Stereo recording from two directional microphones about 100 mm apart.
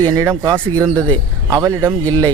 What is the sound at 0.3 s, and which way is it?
Speech, 30° right (ahead or behind).